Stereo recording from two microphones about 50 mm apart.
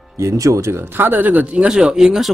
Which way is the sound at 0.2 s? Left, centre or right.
Right.